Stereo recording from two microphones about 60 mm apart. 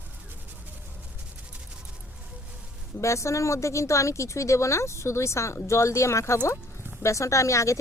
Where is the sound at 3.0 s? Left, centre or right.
Left.